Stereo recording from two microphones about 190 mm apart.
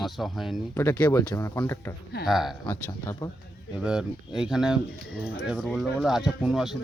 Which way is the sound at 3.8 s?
5° right (ahead or behind).